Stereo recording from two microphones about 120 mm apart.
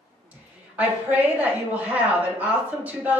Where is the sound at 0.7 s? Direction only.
15° right (ahead or behind).